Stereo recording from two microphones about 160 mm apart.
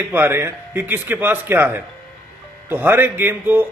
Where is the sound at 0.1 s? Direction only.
15° right (ahead or behind).